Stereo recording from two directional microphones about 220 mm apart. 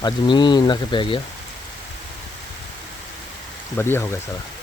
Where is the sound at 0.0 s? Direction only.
20° left (ahead or behind).